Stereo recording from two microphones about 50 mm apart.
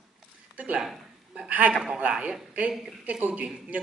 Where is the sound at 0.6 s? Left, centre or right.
Right.